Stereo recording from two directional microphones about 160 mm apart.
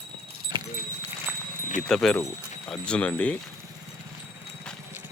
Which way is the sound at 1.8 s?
5° left (ahead or behind).